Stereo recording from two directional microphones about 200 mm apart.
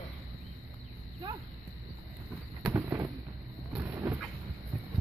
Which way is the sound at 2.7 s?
15° right (ahead or behind).